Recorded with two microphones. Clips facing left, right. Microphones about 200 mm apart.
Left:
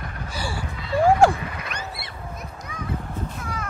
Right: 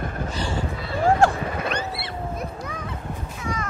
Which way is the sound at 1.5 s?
55° right (ahead or behind).